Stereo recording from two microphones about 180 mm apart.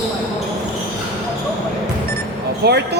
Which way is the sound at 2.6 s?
65° right (ahead or behind).